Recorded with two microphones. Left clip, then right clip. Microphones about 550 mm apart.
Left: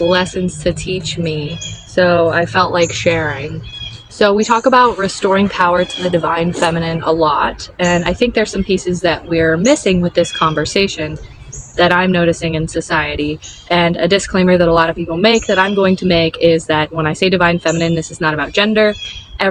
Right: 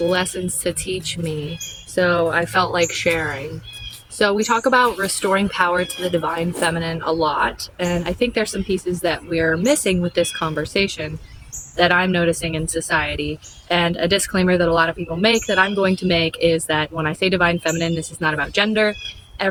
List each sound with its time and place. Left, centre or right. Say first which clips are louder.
0.1 s speech: left 6 dB; right
2.0 s speech: left 6 dB; right
4.2 s speech: left 6 dB; right